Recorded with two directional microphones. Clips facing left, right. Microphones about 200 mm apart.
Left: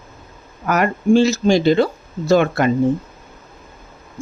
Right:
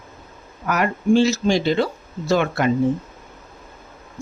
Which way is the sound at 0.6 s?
45° left (ahead or behind).